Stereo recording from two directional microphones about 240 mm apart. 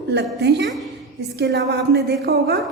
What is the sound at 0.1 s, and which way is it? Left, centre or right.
A woman's voice, right.